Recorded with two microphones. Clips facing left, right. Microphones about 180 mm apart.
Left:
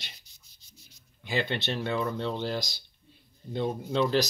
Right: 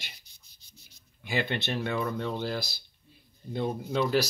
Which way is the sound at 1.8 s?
20° left (ahead or behind).